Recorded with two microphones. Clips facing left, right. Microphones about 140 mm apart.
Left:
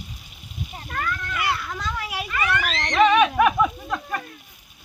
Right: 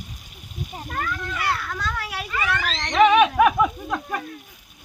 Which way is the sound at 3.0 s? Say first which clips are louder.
Right 2 dB; 5° right (ahead or behind).